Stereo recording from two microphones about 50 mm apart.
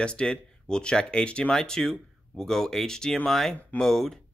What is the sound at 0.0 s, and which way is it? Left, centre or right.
Speech, centre.